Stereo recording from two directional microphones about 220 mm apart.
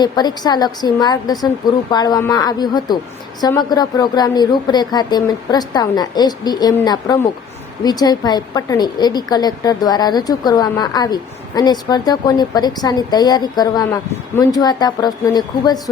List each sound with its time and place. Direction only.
0.0 s a woman's voice: 20° left (ahead or behind)